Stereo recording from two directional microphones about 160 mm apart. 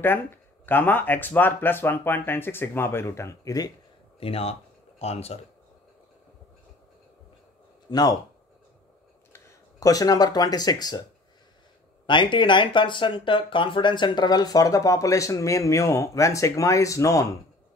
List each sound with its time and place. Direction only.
0.0 s speech: 15° left (ahead or behind)
4.2 s speech: 35° left (ahead or behind)
7.9 s speech: 25° left (ahead or behind)
9.3 s speech: 20° left (ahead or behind)
12.1 s speech: 30° left (ahead or behind)